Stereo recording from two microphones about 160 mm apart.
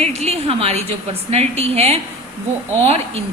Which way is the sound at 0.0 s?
40° right (ahead or behind).